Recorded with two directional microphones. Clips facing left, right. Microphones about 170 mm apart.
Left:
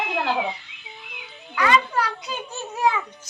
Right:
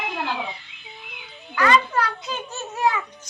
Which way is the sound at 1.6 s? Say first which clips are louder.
Right 1 dB; 10° left (ahead or behind).